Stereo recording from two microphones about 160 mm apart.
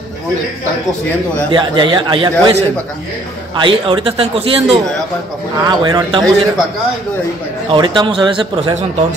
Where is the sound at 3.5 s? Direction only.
30° right (ahead or behind).